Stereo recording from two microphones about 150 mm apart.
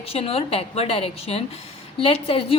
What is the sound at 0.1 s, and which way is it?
A woman's voice, 40° left (ahead or behind).